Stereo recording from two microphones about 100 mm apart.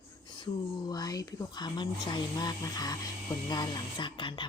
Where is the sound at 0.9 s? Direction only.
40° left (ahead or behind).